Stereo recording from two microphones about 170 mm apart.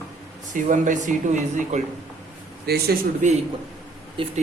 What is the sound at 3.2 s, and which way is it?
Speech, 45° right (ahead or behind).